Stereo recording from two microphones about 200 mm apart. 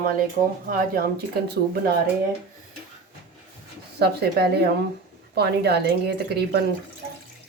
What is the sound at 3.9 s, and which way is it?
A woman's voice, 55° right (ahead or behind).